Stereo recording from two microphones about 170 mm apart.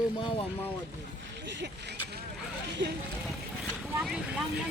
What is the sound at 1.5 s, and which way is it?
Speech, 90° right.